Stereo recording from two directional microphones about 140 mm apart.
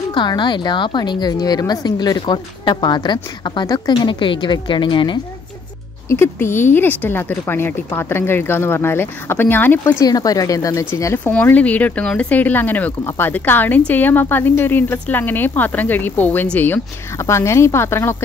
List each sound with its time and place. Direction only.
0.1 s a woman's voice: 35° left (ahead or behind)
6.0 s speech: 15° left (ahead or behind)
9.8 s a woman's voice: 25° left (ahead or behind)